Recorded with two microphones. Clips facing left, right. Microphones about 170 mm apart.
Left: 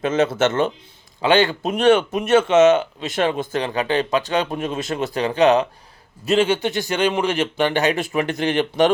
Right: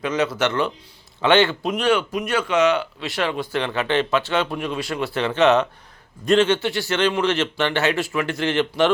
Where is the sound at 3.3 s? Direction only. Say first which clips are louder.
Left 1 dB; 40° left (ahead or behind).